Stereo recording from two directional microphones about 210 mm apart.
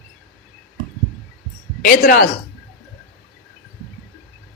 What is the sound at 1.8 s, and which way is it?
Speech, 45° left (ahead or behind).